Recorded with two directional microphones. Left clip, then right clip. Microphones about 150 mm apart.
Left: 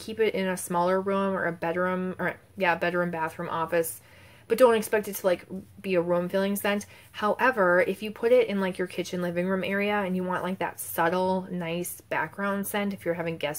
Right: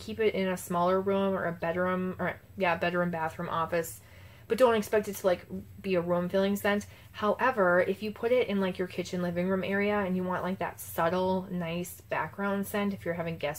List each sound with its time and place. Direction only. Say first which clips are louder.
0.0 s speech: left 2 dB; 35° left (ahead or behind)